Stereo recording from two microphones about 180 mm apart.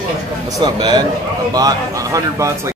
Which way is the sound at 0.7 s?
25° right (ahead or behind).